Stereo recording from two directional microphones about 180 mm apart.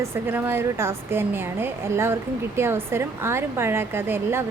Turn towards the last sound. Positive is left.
turn(degrees=-10)  # may be behind; listen again after turning